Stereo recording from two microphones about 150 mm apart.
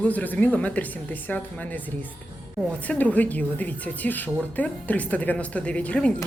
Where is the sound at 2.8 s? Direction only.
10° left (ahead or behind).